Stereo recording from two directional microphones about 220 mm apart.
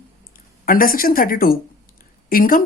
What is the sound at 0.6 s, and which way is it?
A woman's voice, 40° left (ahead or behind).